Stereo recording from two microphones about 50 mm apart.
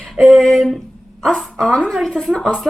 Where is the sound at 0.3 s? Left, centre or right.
Centre.